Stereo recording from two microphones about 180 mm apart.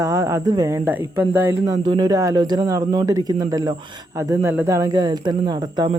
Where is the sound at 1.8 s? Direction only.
20° right (ahead or behind).